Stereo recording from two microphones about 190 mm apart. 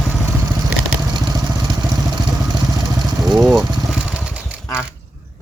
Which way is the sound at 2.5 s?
20° right (ahead or behind).